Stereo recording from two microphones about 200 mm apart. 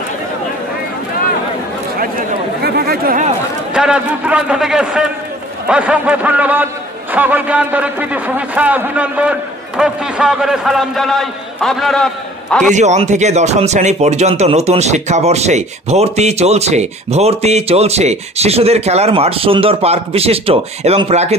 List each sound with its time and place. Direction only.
2.0 s a sound: 50° right (ahead or behind)
3.7 s a man's voice: 5° right (ahead or behind)
12.7 s speech: 35° right (ahead or behind)